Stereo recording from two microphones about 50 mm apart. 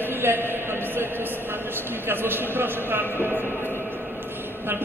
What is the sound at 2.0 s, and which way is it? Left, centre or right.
Speech, right.